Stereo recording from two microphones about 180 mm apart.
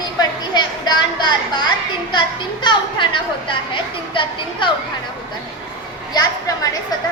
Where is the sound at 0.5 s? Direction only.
25° left (ahead or behind).